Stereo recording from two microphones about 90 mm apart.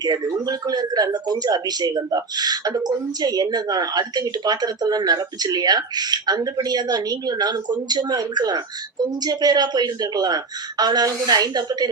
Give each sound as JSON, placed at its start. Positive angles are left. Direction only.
{"t": 0.0, "sound": "speech", "side_deg": -50}